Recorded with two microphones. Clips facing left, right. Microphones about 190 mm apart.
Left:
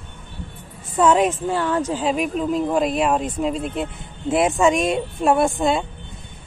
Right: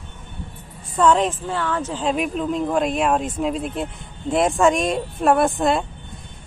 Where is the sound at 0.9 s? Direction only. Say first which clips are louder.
Left 1 dB; 10° left (ahead or behind).